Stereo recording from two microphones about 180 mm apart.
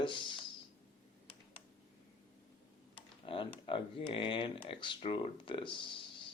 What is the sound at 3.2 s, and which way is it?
Speech, 30° left (ahead or behind).